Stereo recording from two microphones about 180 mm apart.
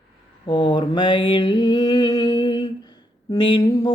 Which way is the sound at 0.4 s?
25° left (ahead or behind).